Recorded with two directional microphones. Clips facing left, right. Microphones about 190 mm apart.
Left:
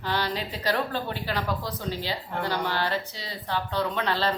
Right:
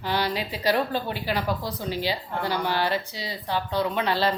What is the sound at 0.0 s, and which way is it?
Speech, 10° right (ahead or behind).